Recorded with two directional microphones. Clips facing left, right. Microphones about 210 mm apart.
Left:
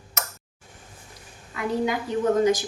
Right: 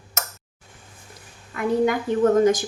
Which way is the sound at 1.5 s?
50° right (ahead or behind).